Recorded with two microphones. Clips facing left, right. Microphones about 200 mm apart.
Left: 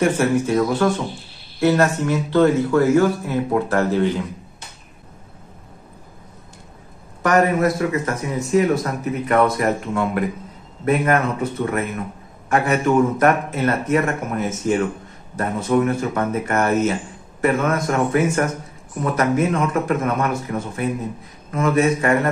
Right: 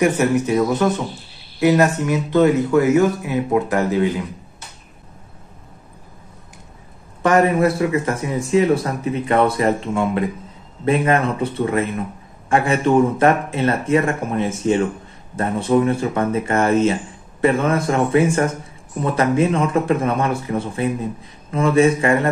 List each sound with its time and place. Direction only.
0.0 s speech: 15° right (ahead or behind)
7.2 s a man's voice: 30° right (ahead or behind)